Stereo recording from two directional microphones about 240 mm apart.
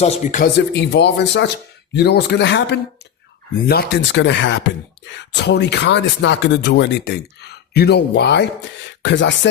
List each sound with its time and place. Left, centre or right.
0.0 s speech: left
0.7 s speech: left